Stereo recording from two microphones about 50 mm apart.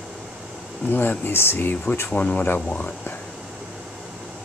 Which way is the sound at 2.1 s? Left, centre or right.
Left.